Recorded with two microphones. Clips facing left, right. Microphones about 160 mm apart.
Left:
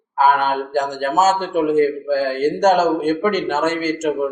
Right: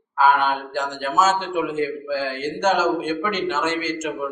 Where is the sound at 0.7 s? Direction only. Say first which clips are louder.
Left 6 dB; 40° left (ahead or behind).